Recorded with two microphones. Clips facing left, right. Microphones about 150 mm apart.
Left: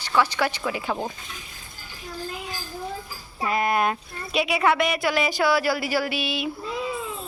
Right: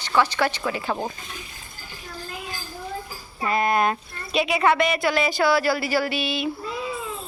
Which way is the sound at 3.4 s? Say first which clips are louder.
Right 1 dB; 10° left (ahead or behind).